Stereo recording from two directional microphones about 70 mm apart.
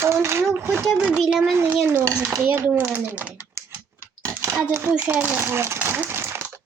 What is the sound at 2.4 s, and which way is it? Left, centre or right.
Speech, right.